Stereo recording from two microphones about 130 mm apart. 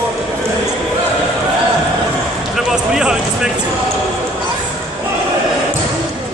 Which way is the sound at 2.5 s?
5° right (ahead or behind).